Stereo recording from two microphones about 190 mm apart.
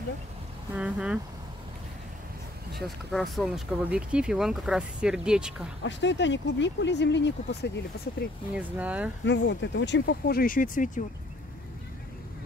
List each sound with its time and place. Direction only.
0.7 s speech: 5° right (ahead or behind)
3.1 s speech: centre (ahead or behind)
5.9 s speech: 70° left (ahead or behind)
8.5 s speech: 5° right (ahead or behind)
9.2 s speech: 70° left (ahead or behind); by 11.1 s 45° left (ahead or behind)